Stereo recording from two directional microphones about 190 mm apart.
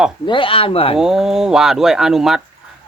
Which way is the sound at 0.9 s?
Centre (ahead or behind).